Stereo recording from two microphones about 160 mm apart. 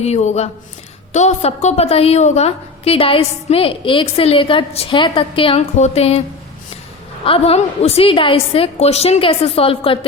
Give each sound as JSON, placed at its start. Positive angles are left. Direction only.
{"t": 0.0, "sound": "a woman's voice", "side_deg": 45}
{"t": 7.3, "sound": "a woman's voice", "side_deg": 35}